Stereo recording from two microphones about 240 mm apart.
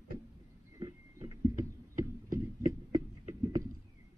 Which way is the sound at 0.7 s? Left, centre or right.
Centre.